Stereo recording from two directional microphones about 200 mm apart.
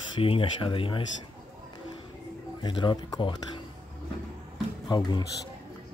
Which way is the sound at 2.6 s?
25° left (ahead or behind).